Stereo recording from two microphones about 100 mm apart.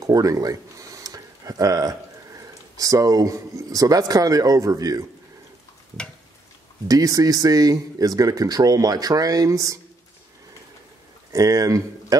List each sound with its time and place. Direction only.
0.0 s speech: 35° right (ahead or behind)
6.9 s speech: 35° right (ahead or behind)
11.3 s speech: 35° right (ahead or behind)